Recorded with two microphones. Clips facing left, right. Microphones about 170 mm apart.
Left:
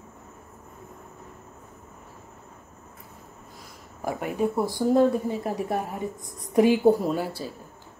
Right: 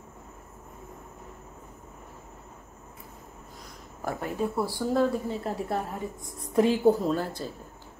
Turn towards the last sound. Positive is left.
turn(degrees=10)  # may be behind; listen again after turning